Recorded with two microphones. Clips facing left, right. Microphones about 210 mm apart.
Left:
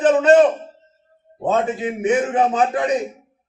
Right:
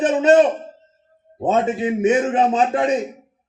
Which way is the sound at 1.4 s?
20° right (ahead or behind).